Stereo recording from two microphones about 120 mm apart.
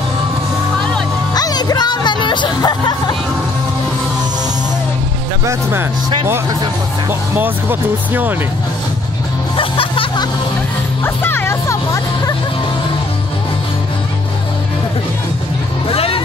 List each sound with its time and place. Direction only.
1.3 s music: 35° left (ahead or behind)
5.5 s speech: 20° right (ahead or behind)
7.1 s speech: 15° right (ahead or behind)
9.6 s music: 45° left (ahead or behind)
11.2 s music: 20° left (ahead or behind)
15.9 s vehicle: 50° left (ahead or behind)